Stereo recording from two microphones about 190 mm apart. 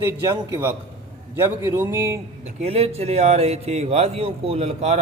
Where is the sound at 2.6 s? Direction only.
30° right (ahead or behind).